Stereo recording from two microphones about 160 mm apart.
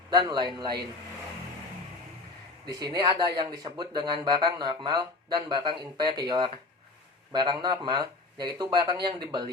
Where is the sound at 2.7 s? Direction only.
30° right (ahead or behind).